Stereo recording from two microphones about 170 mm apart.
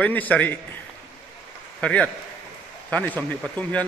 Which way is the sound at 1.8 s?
5° left (ahead or behind).